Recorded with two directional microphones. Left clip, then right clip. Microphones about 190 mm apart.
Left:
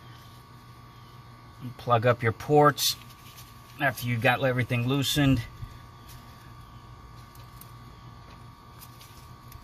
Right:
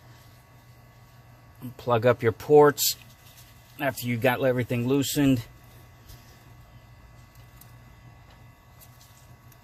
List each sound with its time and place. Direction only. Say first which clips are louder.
1.7 s speech: right 1 dB; 45° right (ahead or behind)